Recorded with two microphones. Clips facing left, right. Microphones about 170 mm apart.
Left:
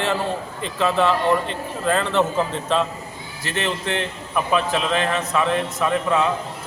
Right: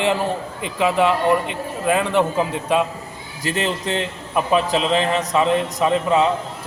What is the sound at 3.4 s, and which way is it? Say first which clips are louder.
A man's voice: right 2 dB; 35° right (ahead or behind).